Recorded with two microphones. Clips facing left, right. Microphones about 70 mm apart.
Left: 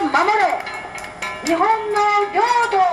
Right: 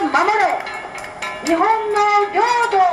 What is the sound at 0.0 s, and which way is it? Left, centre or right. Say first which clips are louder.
Music: right 1 dB; centre.